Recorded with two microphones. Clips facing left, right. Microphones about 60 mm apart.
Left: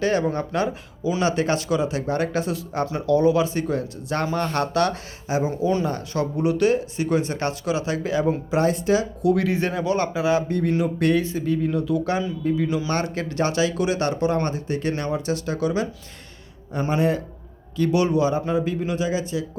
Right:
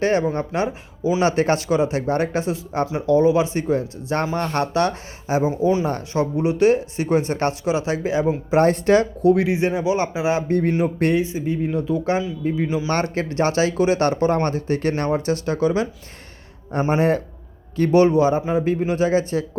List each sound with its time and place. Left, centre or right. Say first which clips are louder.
0.0 s speech: right 2 dB; right
8.5 s speech: right 6 dB; right
9.2 s speech: right 4 dB; right
11.2 s speech: right 1 dB; centre
12.9 s speech: right 3 dB; right
16.9 s speech: right 2 dB; right
19.0 s speech: right 6 dB; right